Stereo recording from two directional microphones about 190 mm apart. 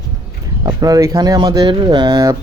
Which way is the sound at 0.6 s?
20° right (ahead or behind).